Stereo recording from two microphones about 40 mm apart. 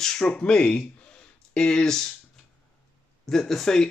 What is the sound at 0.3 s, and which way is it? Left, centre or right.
Speech, left.